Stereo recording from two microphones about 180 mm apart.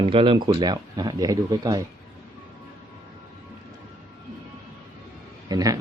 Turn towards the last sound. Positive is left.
turn(degrees=-20)  # may be behind; listen again after turning